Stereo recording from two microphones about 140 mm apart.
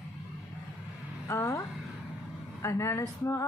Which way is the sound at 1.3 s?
20° left (ahead or behind).